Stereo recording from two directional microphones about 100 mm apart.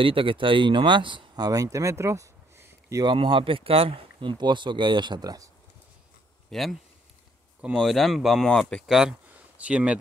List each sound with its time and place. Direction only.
0.0 s speech: 60° right (ahead or behind); by 3.0 s 30° right (ahead or behind)
3.0 s speech: 55° right (ahead or behind)
6.5 s speech: centre (ahead or behind)
7.8 s speech: centre (ahead or behind)
8.5 s speech: 10° left (ahead or behind)
8.8 s speech: 5° right (ahead or behind)